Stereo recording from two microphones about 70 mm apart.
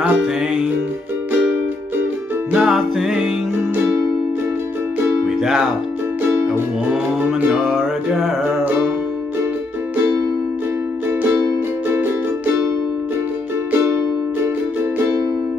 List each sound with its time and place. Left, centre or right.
0.0 s music: centre
2.5 s music: centre
5.0 s music: right
5.4 s music: centre
6.9 s music: centre
11.9 s music: right